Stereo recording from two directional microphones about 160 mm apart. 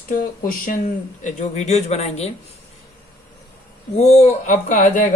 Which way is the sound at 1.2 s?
45° left (ahead or behind).